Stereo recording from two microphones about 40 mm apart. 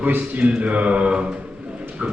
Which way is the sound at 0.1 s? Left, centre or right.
Right.